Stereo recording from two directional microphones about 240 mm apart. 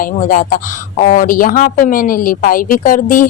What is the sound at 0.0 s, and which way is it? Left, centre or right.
Speech, left.